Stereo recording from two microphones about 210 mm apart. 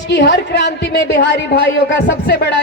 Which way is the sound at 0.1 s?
55° left (ahead or behind).